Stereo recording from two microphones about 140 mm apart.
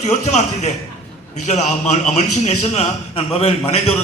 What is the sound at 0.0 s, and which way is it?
A man's voice, 55° left (ahead or behind).